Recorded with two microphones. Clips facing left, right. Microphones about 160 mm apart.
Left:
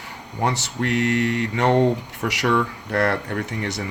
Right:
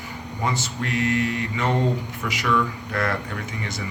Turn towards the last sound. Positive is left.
turn(degrees=65)  # may be behind; listen again after turning